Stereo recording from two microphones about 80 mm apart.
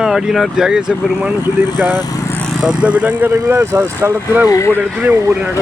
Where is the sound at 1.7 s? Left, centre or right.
Right.